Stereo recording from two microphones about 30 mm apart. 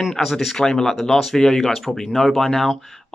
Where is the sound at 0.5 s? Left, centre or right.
Left.